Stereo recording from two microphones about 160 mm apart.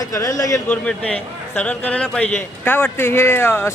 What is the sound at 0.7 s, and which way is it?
Speech, 5° left (ahead or behind).